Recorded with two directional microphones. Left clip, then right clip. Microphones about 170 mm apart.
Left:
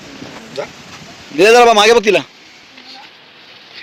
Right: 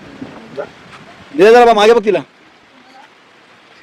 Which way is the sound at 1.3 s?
10° right (ahead or behind).